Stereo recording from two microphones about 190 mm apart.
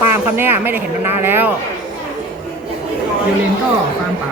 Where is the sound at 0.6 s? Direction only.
10° right (ahead or behind).